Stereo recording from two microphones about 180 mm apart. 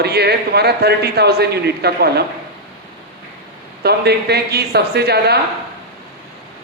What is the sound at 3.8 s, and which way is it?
Speech, 65° right (ahead or behind).